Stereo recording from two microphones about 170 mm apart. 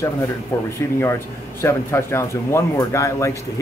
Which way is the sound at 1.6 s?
15° left (ahead or behind).